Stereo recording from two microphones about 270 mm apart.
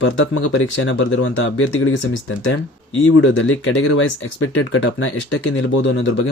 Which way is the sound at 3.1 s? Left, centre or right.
Left.